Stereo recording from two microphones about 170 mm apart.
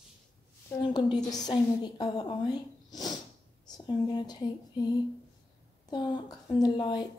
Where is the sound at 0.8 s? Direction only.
25° left (ahead or behind).